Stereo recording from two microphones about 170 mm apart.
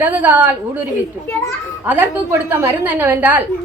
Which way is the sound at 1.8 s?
10° right (ahead or behind).